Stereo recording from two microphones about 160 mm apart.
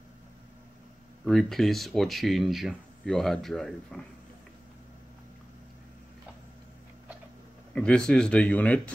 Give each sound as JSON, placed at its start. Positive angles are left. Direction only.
{"t": 1.2, "sound": "speech", "side_deg": 0}
{"t": 7.7, "sound": "speech", "side_deg": 5}